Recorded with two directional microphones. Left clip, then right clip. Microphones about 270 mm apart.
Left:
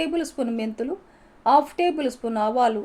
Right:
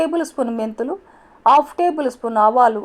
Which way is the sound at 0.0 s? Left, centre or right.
Centre.